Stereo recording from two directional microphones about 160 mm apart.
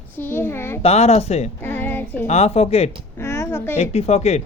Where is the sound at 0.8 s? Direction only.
40° left (ahead or behind).